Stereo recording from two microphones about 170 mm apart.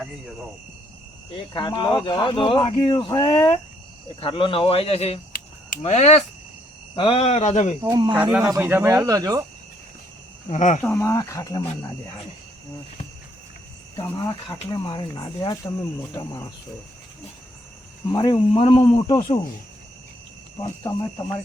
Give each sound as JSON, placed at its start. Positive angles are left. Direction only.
{"t": 1.5, "sound": "speech", "side_deg": 25}
{"t": 7.8, "sound": "speech", "side_deg": -25}
{"t": 8.4, "sound": "speech", "side_deg": -15}
{"t": 10.5, "sound": "speech", "side_deg": 45}
{"t": 10.8, "sound": "speech", "side_deg": 10}
{"t": 13.9, "sound": "speech", "side_deg": 20}
{"t": 18.1, "sound": "speech", "side_deg": 25}
{"t": 20.6, "sound": "speech", "side_deg": 20}